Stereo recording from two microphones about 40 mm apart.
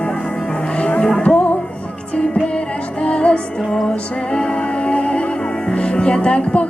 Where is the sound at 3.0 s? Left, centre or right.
Left.